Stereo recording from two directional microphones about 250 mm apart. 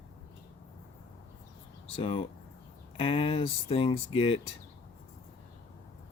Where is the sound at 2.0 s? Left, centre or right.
Left.